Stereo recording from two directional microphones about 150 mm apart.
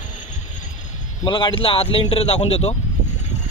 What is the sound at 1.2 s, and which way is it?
Speech, 35° left (ahead or behind).